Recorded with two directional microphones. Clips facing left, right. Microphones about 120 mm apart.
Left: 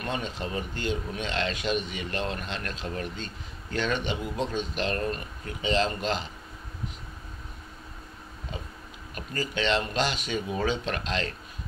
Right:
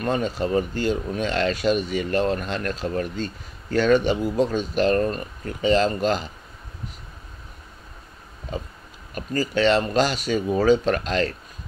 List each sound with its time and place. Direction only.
0.0 s speech: 40° right (ahead or behind)
9.1 s speech: 40° right (ahead or behind)